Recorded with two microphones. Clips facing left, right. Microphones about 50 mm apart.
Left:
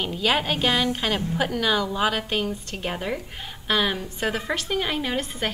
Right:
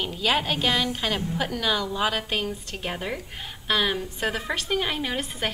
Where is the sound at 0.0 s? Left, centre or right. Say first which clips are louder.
Left 1 dB; centre.